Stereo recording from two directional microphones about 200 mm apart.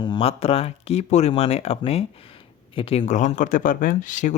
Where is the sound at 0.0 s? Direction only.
25° left (ahead or behind).